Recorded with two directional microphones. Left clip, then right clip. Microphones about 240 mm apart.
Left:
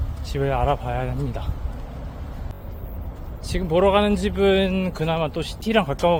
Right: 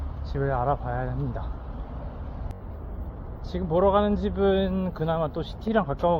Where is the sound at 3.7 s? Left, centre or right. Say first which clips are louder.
Left 4 dB; centre.